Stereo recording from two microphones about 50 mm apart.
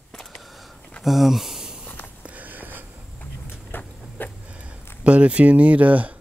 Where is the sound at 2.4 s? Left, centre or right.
Right.